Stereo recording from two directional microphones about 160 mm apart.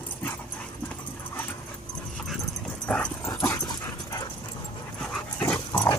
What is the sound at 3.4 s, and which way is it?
Dog, 20° left (ahead or behind).